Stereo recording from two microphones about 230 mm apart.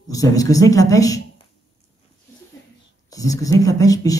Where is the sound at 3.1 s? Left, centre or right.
Centre.